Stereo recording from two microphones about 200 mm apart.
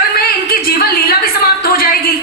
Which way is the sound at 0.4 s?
50° left (ahead or behind).